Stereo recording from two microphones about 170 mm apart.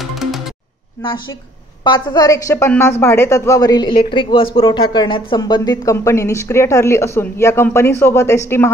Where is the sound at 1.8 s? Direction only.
25° left (ahead or behind).